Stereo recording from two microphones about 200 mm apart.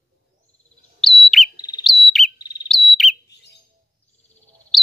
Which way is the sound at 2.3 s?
20° left (ahead or behind).